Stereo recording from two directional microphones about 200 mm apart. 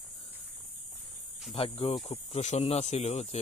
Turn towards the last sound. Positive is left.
turn(degrees=35)  # may be behind; listen again after turning